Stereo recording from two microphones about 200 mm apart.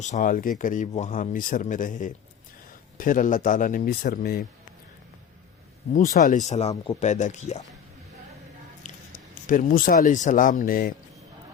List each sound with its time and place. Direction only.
0.0 s speech: 40° left (ahead or behind)
5.9 s speech: 40° left (ahead or behind)
8.8 s speech: 40° left (ahead or behind)